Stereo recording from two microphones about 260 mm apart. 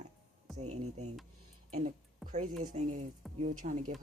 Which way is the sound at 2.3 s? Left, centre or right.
Right.